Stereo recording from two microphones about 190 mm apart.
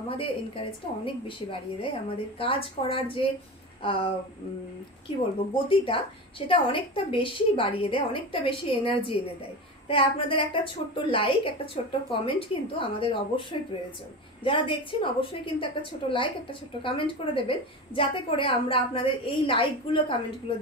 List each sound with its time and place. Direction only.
0.1 s a woman's voice: 30° left (ahead or behind)
6.4 s a woman's voice: 30° left (ahead or behind)